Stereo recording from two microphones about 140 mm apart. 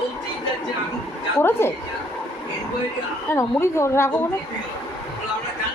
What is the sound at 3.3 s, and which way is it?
Speech, 20° left (ahead or behind).